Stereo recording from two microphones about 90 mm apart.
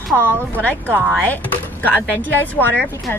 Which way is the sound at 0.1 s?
25° right (ahead or behind).